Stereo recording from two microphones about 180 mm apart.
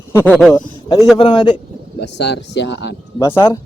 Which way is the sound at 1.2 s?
30° left (ahead or behind).